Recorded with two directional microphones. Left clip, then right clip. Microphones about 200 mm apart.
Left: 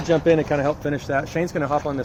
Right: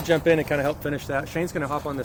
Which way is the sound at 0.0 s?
35° left (ahead or behind).